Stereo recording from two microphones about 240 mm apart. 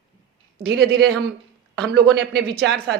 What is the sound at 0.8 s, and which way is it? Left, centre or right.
Speech, right.